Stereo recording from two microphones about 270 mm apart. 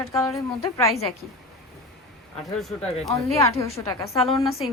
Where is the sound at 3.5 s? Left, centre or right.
Centre.